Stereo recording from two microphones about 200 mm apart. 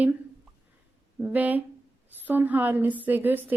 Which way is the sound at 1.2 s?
10° right (ahead or behind).